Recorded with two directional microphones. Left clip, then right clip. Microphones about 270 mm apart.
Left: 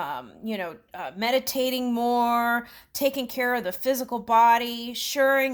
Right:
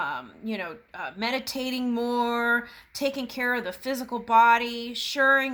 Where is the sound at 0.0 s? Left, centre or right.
Left.